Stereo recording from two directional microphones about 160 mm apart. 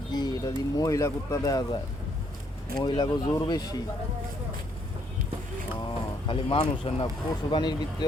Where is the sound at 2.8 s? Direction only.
25° left (ahead or behind).